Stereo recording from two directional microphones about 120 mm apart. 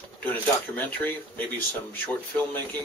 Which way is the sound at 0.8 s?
15° left (ahead or behind).